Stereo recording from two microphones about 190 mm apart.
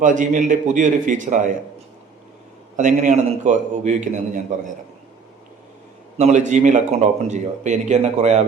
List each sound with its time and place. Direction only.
0.0 s speech: 40° right (ahead or behind)
2.7 s speech: 40° right (ahead or behind)
6.1 s speech: 40° right (ahead or behind)